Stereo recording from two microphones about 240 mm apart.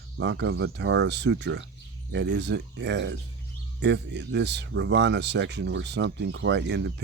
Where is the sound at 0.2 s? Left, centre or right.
Right.